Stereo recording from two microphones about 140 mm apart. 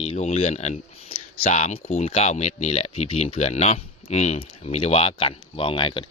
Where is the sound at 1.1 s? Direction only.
50° left (ahead or behind).